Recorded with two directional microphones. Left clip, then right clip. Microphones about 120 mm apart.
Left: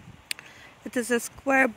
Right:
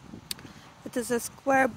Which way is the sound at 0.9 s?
45° left (ahead or behind).